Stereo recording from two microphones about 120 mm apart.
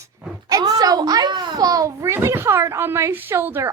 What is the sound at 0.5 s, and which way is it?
A child's voice, 30° right (ahead or behind).